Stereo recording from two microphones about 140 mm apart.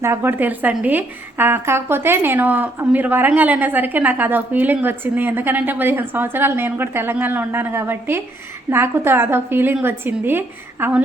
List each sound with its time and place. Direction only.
0.0 s speech: 15° right (ahead or behind)